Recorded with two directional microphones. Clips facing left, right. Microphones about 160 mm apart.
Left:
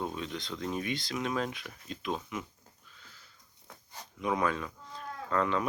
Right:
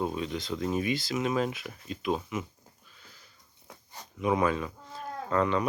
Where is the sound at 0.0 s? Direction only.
10° right (ahead or behind).